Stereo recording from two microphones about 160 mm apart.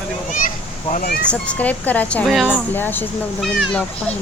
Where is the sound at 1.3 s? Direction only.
10° left (ahead or behind).